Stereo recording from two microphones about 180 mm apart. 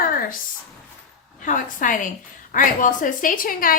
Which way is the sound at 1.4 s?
45° left (ahead or behind).